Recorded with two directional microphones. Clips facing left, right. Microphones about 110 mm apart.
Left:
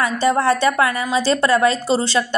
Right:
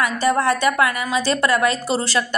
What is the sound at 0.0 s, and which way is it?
A woman's voice, 30° left (ahead or behind).